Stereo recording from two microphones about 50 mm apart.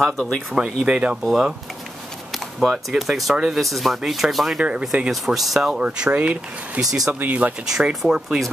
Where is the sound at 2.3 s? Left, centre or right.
Centre.